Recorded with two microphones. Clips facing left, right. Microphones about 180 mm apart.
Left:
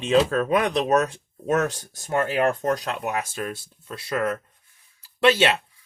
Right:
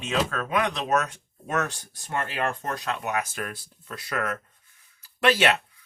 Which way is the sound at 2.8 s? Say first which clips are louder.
Left 1 dB; 35° left (ahead or behind).